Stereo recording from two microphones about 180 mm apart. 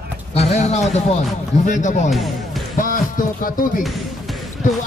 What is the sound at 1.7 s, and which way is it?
Speech, 45° left (ahead or behind).